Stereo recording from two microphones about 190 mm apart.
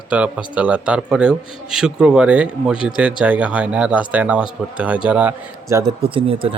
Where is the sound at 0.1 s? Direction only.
5° right (ahead or behind).